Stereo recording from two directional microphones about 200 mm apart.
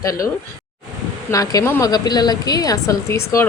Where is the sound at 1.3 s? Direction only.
15° left (ahead or behind).